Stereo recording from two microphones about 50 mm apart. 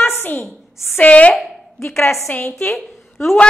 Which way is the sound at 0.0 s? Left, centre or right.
Left.